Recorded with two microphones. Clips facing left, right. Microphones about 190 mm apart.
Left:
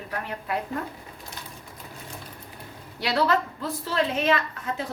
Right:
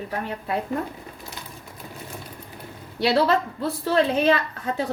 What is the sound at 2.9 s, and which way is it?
A woman's voice, 30° right (ahead or behind).